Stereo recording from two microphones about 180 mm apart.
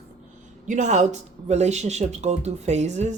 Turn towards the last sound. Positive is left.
turn(degrees=-40)  # may be behind; listen again after turning